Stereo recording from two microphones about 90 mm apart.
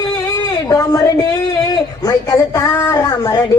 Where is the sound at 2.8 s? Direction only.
35° left (ahead or behind).